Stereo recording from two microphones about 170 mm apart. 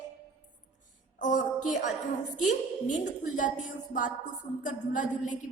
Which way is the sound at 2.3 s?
45° left (ahead or behind).